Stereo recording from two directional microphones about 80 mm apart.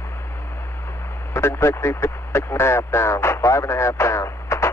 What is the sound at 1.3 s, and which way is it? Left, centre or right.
Speech, left.